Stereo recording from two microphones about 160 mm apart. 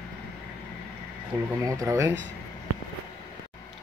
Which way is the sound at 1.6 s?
20° right (ahead or behind).